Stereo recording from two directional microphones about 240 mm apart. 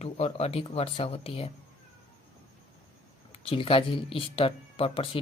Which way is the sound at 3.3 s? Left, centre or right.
Left.